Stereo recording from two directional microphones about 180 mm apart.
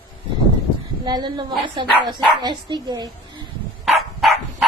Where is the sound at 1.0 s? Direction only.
25° right (ahead or behind).